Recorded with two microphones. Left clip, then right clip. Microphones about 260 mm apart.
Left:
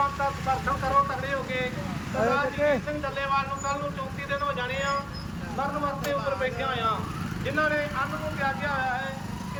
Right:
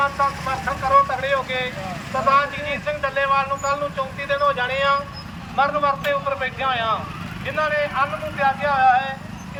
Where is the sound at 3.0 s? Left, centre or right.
Centre.